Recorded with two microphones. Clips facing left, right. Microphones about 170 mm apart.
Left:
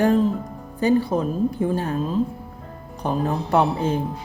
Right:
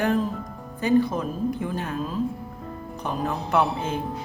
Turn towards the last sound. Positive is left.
turn(degrees=35)  # may be behind; listen again after turning